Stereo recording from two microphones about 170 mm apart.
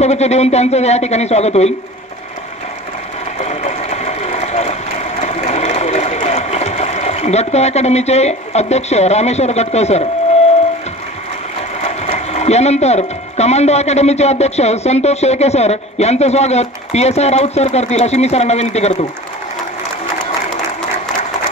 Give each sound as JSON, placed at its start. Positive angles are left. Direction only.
{"t": 0.0, "sound": "speech", "side_deg": 40}
{"t": 3.3, "sound": "a sound", "side_deg": 40}
{"t": 11.8, "sound": "speech", "side_deg": 40}